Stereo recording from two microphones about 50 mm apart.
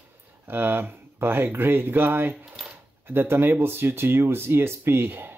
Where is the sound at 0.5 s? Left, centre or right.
Right.